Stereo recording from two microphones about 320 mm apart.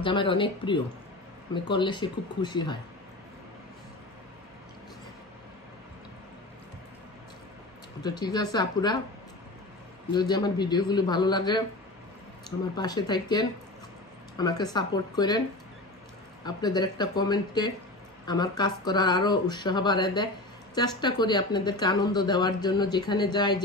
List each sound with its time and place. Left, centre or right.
0.0 s speech: centre
8.0 s speech: centre
10.1 s speech: centre
16.4 s speech: centre